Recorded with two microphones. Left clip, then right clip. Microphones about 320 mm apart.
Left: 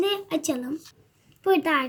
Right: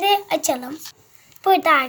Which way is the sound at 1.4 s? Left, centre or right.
Right.